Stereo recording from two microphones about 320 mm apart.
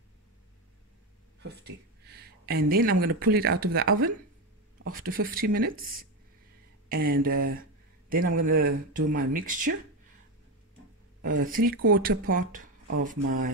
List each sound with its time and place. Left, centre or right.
1.4 s speech: right
11.2 s speech: right